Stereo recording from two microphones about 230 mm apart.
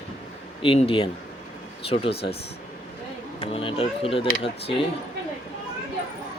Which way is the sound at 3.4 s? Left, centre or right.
Left.